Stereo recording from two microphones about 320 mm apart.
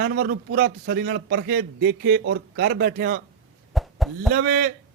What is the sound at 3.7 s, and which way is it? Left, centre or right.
Cough, centre.